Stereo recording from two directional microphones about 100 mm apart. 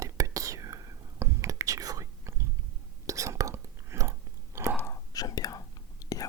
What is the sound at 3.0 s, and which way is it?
Chewing, 30° right (ahead or behind).